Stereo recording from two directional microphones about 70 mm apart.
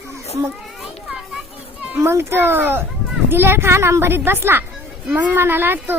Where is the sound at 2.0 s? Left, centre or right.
Right.